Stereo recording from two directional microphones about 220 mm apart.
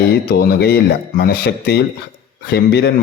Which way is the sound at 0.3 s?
45° left (ahead or behind).